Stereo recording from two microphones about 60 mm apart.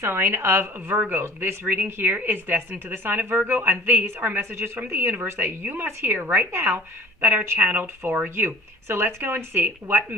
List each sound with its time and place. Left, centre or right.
0.0 s speech: right